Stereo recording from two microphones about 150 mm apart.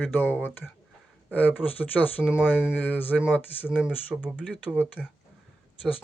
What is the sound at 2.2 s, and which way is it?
Speech, 5° right (ahead or behind).